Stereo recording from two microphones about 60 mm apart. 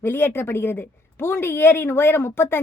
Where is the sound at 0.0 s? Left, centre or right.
Left.